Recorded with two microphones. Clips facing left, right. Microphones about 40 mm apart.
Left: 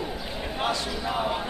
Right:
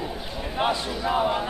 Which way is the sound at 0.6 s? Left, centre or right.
Centre.